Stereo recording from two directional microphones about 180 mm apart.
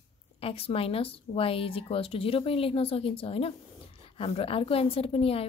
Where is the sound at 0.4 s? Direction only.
30° left (ahead or behind).